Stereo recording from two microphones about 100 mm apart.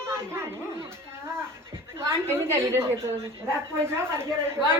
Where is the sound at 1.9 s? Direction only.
25° right (ahead or behind).